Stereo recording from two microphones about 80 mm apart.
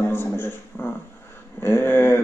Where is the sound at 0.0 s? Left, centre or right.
Left.